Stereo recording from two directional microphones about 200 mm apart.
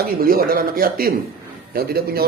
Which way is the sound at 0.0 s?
45° right (ahead or behind).